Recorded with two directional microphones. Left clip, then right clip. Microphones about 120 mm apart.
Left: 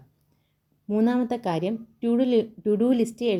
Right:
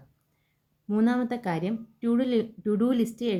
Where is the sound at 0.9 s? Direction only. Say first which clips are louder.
Left 3 dB; 20° left (ahead or behind).